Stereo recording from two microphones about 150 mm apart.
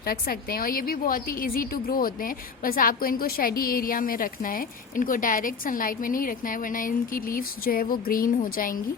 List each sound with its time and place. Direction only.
0.0 s a woman's voice: 85° left